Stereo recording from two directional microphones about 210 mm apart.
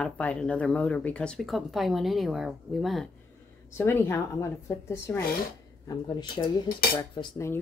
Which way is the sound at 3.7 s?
10° left (ahead or behind).